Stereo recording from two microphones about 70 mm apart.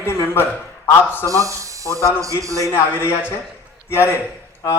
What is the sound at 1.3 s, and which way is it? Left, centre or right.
A man's voice, right.